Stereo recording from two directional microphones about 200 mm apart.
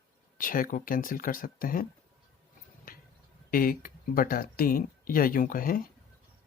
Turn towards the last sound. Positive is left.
turn(degrees=45)  # may be behind; listen again after turning